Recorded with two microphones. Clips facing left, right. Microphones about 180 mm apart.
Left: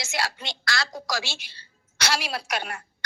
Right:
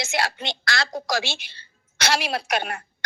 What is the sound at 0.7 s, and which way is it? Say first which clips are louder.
Speech: right 3 dB; 55° right (ahead or behind).